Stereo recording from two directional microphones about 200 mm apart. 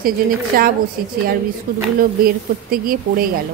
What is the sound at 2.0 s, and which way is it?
Speech, 45° right (ahead or behind).